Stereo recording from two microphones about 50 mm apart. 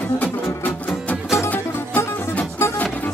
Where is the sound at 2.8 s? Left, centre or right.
Left.